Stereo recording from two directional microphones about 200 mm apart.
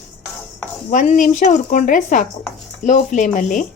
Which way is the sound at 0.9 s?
40° left (ahead or behind).